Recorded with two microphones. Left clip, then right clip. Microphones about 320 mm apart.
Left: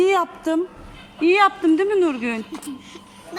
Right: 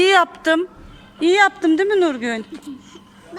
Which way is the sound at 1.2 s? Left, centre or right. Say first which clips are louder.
Right 1 dB; right.